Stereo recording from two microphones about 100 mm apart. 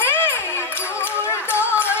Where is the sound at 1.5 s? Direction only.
20° left (ahead or behind).